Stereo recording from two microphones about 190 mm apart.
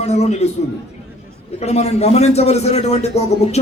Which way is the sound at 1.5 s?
35° left (ahead or behind).